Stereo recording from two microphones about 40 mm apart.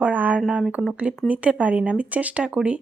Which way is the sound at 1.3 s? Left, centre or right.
Right.